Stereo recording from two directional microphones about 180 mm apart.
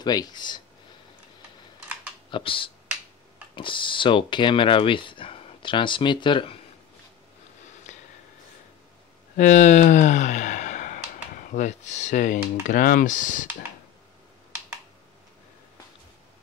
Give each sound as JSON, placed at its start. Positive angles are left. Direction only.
{"t": 0.0, "sound": "speech", "side_deg": 20}
{"t": 2.3, "sound": "speech", "side_deg": 30}
{"t": 9.4, "sound": "speech", "side_deg": 45}